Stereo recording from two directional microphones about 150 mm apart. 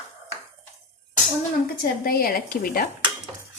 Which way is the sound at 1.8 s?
85° left.